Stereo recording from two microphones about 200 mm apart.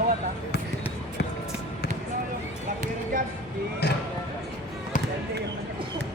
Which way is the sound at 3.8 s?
55° left (ahead or behind).